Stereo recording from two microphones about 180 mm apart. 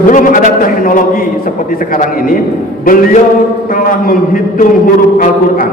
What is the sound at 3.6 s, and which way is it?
A man's voice, 50° left (ahead or behind).